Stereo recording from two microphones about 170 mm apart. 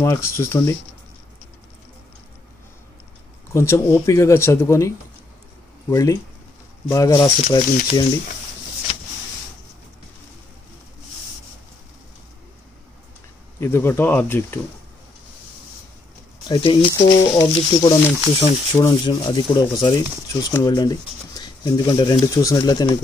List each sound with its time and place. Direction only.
0.0 s speech: 15° left (ahead or behind)
3.5 s speech: 15° left (ahead or behind)
7.4 s speech: 35° left (ahead or behind)
13.6 s speech: 15° left (ahead or behind)
16.4 s speech: 25° left (ahead or behind)